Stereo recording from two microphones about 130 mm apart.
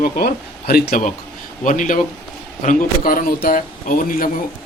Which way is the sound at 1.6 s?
85° left.